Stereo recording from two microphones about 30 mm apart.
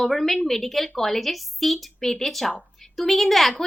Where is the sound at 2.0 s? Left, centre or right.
Centre.